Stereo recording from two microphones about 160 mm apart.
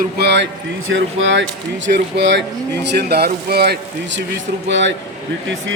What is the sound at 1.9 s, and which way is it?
Speech, 90° right.